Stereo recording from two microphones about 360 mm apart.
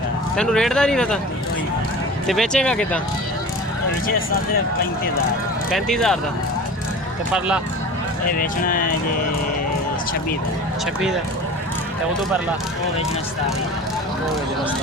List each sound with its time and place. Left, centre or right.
0.3 s speech: centre
2.2 s speech: centre
5.7 s speech: centre
7.3 s speech: centre
8.3 s speech: left